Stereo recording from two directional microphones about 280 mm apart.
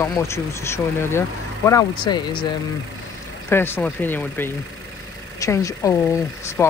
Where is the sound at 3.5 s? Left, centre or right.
Centre.